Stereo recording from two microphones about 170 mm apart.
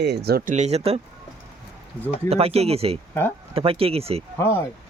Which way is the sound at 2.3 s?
35° right (ahead or behind).